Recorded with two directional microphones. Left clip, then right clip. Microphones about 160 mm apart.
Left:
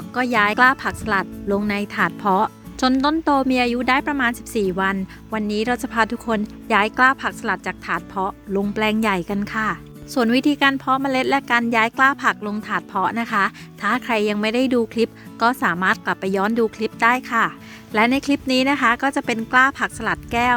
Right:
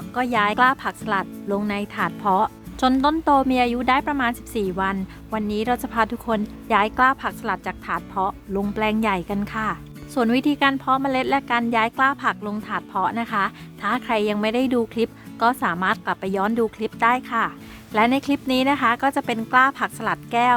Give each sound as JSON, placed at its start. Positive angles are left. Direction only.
{"t": 0.1, "sound": "a woman's voice", "side_deg": 30}
{"t": 2.9, "sound": "a woman's voice", "side_deg": 25}